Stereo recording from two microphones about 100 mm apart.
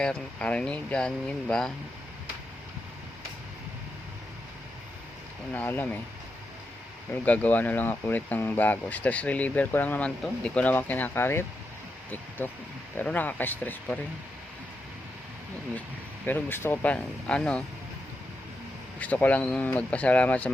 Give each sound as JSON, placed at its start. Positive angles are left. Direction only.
{"t": 0.0, "sound": "speech", "side_deg": 10}
{"t": 5.5, "sound": "speech", "side_deg": 20}
{"t": 7.1, "sound": "speech", "side_deg": 15}
{"t": 16.2, "sound": "speech", "side_deg": 20}
{"t": 18.9, "sound": "speech", "side_deg": 15}